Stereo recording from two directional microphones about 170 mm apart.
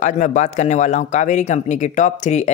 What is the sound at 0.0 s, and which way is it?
Speech, 50° left (ahead or behind).